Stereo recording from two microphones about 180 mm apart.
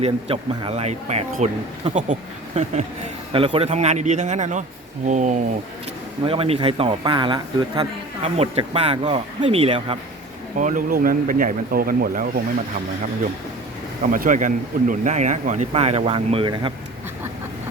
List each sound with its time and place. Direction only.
0.0 s speech: 35° right (ahead or behind)
3.3 s speech: 30° right (ahead or behind)
6.2 s speech: 30° right (ahead or behind)
10.6 s speech: 45° right (ahead or behind)
14.1 s speech: 45° right (ahead or behind); by 16.7 s 30° right (ahead or behind)